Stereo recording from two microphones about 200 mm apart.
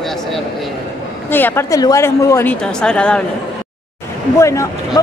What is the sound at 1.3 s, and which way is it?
Speech, 10° left (ahead or behind).